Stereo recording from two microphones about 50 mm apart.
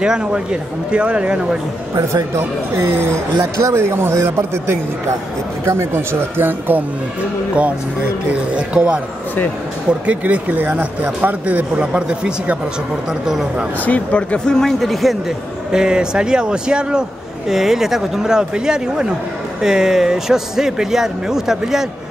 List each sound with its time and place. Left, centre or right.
0.0 s speech: centre
2.3 s speech: right
3.3 s speech: right
7.5 s speech: right
14.1 s a man's voice: centre
15.7 s speech: centre